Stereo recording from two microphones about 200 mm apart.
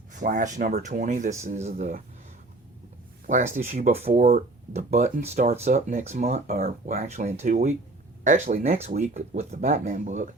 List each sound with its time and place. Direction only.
0.1 s speech: 40° right (ahead or behind)
3.2 s speech: 40° right (ahead or behind)